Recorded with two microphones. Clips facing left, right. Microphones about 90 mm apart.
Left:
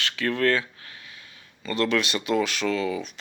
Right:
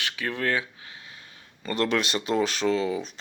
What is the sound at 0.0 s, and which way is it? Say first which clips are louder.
Speech: left 5 dB; 15° right (ahead or behind).